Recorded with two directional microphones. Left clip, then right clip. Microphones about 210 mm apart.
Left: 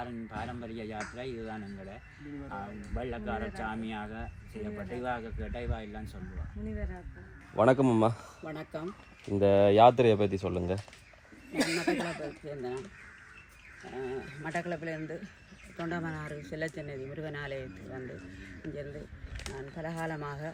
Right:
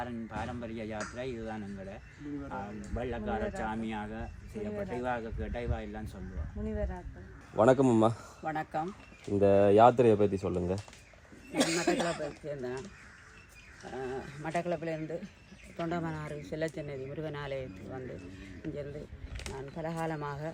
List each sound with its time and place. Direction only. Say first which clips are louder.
0.0 s a man's voice: right 1 dB; centre (ahead or behind)
7.5 s a man's voice: even; 30° left (ahead or behind)
8.4 s a man's voice: right 6 dB; 5° right (ahead or behind)
9.3 s speech: even; 35° left (ahead or behind)
11.5 s speech: right 1 dB; 60° right (ahead or behind)
12.0 s a man's voice: right 3 dB; centre (ahead or behind)
14.0 s a man's voice: left 1 dB; centre (ahead or behind)